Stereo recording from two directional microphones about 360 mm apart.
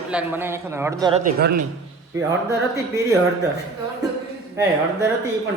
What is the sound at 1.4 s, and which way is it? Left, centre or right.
Speech, right.